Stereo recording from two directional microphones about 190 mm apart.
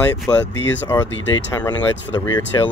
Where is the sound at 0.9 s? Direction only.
20° left (ahead or behind).